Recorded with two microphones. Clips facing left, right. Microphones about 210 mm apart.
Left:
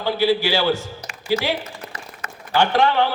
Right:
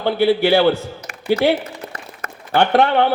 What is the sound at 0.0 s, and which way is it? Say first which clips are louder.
A man's voice: right 4 dB; 55° right (ahead or behind).